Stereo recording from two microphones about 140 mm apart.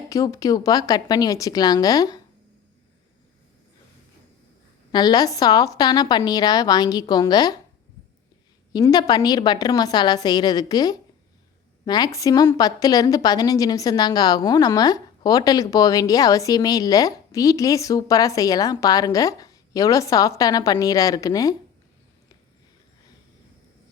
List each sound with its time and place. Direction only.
0.1 s a woman's voice: 25° left (ahead or behind)
4.9 s a woman's voice: 30° left (ahead or behind)
8.7 s a woman's voice: 30° left (ahead or behind)